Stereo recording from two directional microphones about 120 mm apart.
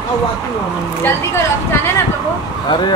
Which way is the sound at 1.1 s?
20° left (ahead or behind).